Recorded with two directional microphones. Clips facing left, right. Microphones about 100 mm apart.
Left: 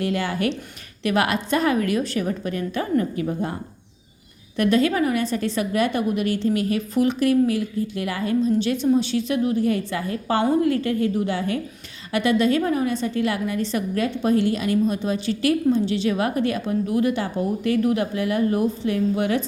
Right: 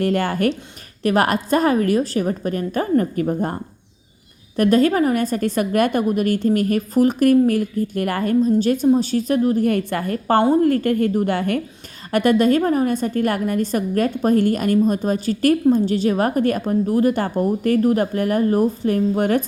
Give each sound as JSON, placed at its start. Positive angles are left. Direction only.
{"t": 0.0, "sound": "a woman's voice", "side_deg": -50}
{"t": 9.6, "sound": "a woman's voice", "side_deg": -55}